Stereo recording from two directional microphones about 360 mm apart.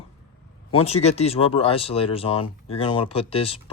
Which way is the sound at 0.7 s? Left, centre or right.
Centre.